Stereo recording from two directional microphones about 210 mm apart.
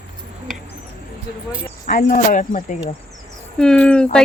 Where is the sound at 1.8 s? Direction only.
40° left (ahead or behind).